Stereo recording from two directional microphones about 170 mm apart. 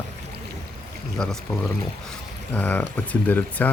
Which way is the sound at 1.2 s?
5° left (ahead or behind).